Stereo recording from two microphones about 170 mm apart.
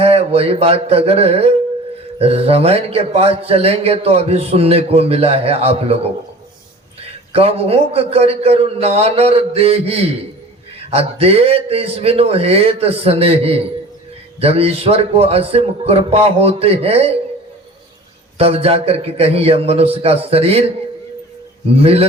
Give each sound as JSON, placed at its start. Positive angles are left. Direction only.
{"t": 0.0, "sound": "a man's voice", "side_deg": -35}
{"t": 18.3, "sound": "a man's voice", "side_deg": -35}
{"t": 21.8, "sound": "a man's voice", "side_deg": -35}